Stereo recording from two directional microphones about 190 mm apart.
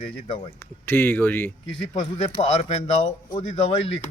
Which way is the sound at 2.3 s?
35° left (ahead or behind).